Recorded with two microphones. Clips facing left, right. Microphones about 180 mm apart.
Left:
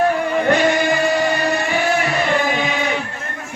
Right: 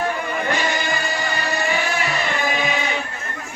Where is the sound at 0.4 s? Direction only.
60° left (ahead or behind).